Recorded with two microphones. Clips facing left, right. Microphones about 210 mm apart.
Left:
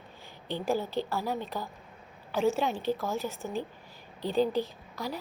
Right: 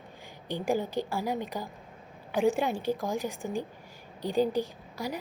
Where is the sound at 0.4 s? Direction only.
15° right (ahead or behind).